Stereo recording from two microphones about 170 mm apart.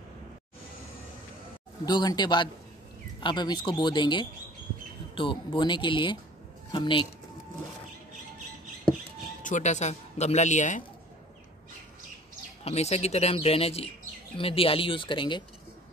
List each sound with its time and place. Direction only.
1.9 s speech: 25° left (ahead or behind)
9.4 s speech: 45° left (ahead or behind)
12.6 s speech: 40° left (ahead or behind)